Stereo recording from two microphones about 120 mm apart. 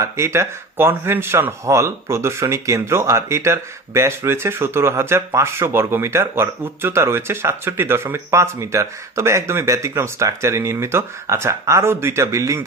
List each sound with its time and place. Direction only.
0.0 s speech: 25° right (ahead or behind)